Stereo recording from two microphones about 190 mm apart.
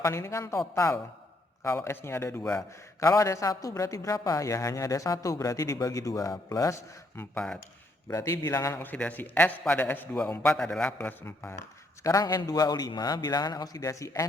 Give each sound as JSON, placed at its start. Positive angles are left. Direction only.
{"t": 0.0, "sound": "speech", "side_deg": 15}
{"t": 1.6, "sound": "a man's voice", "side_deg": 15}
{"t": 7.2, "sound": "speech", "side_deg": 5}
{"t": 8.0, "sound": "a man's voice", "side_deg": 15}